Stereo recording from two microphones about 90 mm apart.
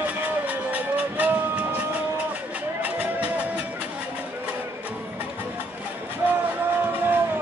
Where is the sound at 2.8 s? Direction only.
15° right (ahead or behind).